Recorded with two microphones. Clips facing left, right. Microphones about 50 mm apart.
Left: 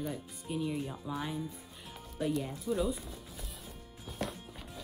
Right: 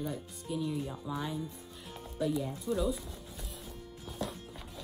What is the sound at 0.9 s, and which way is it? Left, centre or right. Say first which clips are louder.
Speech: right 1 dB; centre.